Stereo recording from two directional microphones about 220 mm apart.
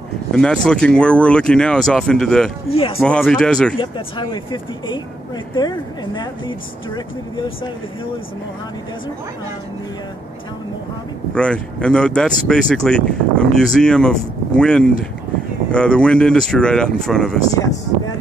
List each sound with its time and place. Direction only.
0.3 s speech: 5° left (ahead or behind)
2.7 s speech: 25° left (ahead or behind)
3.0 s speech: 5° left (ahead or behind)
3.8 s speech: 20° left (ahead or behind)
11.3 s speech: 5° left (ahead or behind)
17.5 s speech: 15° left (ahead or behind)